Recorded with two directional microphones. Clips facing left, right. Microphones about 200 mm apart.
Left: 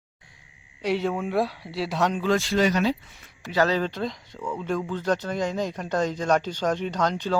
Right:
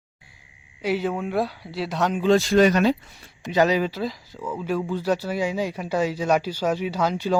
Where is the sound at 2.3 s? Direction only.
45° right (ahead or behind).